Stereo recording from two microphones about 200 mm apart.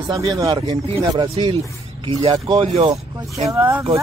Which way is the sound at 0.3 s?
20° right (ahead or behind).